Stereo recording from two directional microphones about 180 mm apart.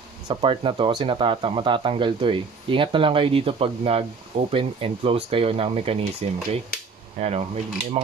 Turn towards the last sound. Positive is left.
turn(degrees=-35)  # may be behind; listen again after turning